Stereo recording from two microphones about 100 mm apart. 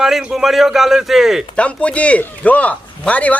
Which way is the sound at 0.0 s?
5° right (ahead or behind).